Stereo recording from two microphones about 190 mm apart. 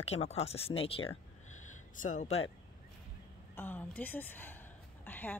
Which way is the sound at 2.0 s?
40° left (ahead or behind).